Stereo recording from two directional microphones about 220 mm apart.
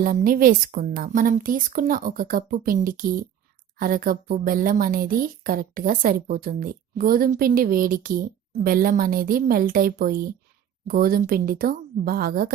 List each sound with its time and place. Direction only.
0.0 s a woman's voice: 40° right (ahead or behind)